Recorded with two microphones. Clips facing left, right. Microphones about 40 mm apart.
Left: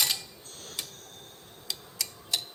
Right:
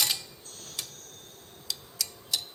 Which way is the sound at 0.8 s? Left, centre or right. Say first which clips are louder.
Even; centre.